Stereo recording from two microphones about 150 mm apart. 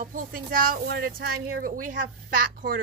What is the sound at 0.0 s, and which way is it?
Speech, 65° right (ahead or behind).